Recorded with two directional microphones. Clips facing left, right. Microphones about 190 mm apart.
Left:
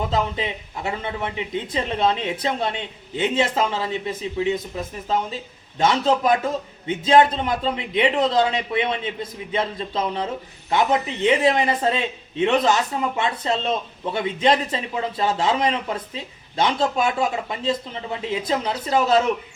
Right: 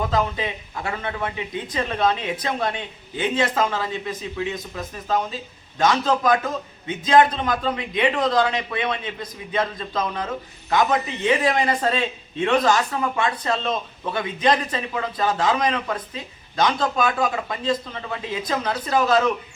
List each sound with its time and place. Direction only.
0.1 s a man's voice: 20° left (ahead or behind)